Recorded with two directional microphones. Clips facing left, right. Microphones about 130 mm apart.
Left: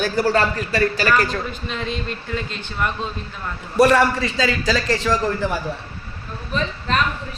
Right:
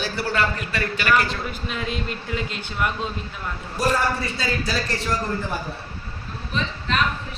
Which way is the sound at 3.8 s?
75° left (ahead or behind).